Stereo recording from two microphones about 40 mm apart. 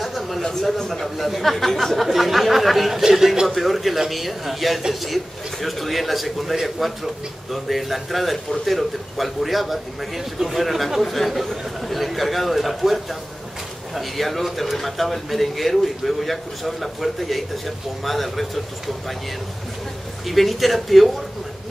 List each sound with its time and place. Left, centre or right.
0.0 s a sound: centre
0.6 s speech: centre
20.2 s speech: centre